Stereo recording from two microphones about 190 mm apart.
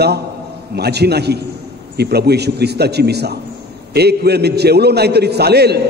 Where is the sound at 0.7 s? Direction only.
60° right (ahead or behind).